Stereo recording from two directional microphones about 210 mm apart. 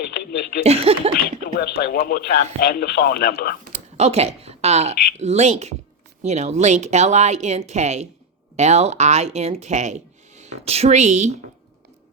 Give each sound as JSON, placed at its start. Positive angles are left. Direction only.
{"t": 0.0, "sound": "a sound", "side_deg": 50}
{"t": 0.6, "sound": "speech", "side_deg": -30}
{"t": 1.5, "sound": "speech", "side_deg": 50}
{"t": 3.6, "sound": "speech", "side_deg": -35}